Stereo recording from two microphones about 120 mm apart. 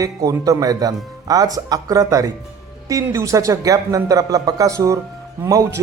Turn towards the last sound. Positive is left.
turn(degrees=-25)  # may be behind; listen again after turning